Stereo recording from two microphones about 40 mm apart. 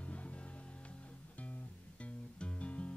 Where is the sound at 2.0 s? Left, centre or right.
Left.